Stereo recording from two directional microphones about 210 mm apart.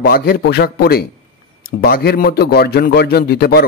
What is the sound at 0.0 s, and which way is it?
A man's voice, 45° left (ahead or behind).